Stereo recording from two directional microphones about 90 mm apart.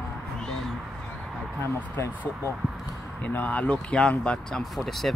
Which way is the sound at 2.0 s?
30° left (ahead or behind).